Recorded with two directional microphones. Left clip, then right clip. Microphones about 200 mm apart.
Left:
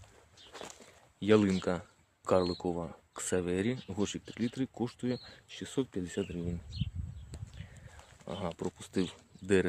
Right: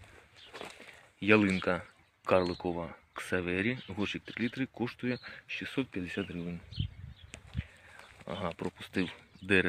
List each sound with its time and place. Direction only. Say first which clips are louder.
1.2 s speech: right 1 dB; 10° left (ahead or behind)
8.4 s speech: right 1 dB; 5° left (ahead or behind)